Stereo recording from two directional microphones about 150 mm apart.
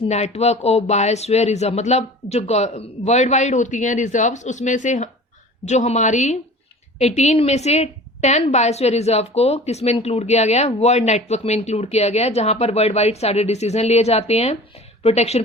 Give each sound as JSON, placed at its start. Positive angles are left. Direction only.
{"t": 0.0, "sound": "a woman's voice", "side_deg": 45}